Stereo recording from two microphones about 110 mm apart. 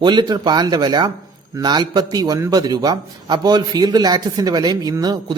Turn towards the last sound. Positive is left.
turn(degrees=-40)  # may be behind; listen again after turning